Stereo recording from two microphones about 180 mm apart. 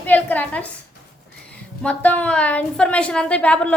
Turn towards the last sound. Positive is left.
turn(degrees=5)  # may be behind; listen again after turning